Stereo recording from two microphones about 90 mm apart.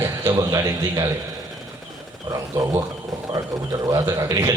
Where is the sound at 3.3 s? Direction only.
40° right (ahead or behind).